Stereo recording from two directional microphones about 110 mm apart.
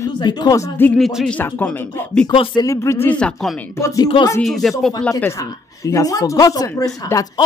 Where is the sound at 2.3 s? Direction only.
55° left (ahead or behind).